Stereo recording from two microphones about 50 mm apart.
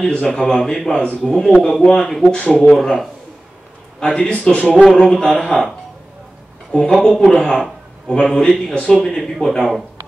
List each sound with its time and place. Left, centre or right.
0.0 s a man's voice: centre
2.3 s a man's voice: left
2.8 s a man's voice: centre
4.5 s a man's voice: centre
6.7 s a man's voice: centre
8.7 s a man's voice: left
9.0 s a man's voice: centre